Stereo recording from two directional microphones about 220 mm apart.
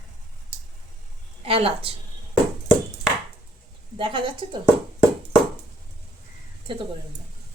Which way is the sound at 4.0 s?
25° right (ahead or behind).